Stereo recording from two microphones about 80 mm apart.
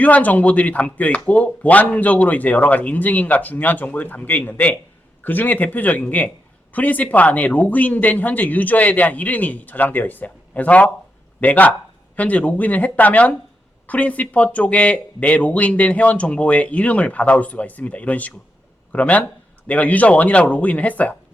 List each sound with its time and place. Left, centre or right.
0.0 s a man's voice: centre